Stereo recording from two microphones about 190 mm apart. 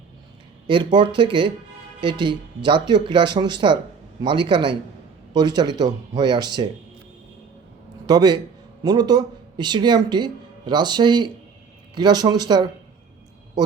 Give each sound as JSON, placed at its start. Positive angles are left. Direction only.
{"t": 0.7, "sound": "speech", "side_deg": -25}
{"t": 8.0, "sound": "a man's voice", "side_deg": -20}